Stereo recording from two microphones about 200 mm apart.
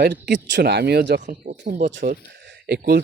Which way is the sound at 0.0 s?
55° right (ahead or behind).